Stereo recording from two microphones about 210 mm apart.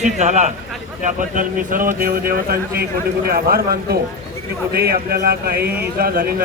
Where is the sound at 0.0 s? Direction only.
35° right (ahead or behind).